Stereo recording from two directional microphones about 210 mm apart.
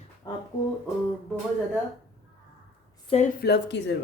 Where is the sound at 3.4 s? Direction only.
55° left (ahead or behind).